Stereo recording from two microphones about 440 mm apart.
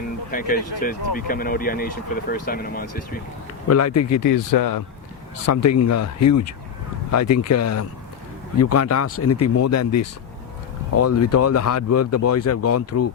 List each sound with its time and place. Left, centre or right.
0.3 s speech: centre
3.7 s speech: left